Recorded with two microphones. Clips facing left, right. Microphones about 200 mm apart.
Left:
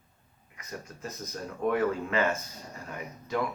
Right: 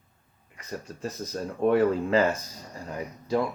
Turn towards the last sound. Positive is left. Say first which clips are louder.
# right 5 dB
turn(degrees=-30)  # may be behind; listen again after turning